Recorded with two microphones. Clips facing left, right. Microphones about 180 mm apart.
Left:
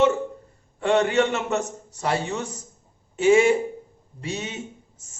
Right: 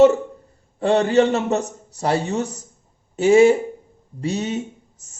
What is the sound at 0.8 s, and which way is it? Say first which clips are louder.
A man's voice: right 4 dB; 35° right (ahead or behind).